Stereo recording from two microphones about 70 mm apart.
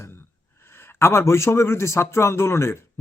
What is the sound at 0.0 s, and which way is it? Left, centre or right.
Speech, left.